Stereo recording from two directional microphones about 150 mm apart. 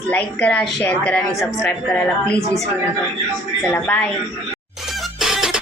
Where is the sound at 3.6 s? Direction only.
10° left (ahead or behind).